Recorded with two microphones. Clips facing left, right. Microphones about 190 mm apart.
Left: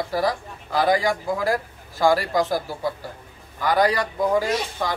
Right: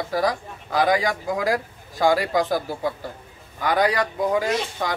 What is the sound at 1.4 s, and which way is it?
Speech, 15° right (ahead or behind).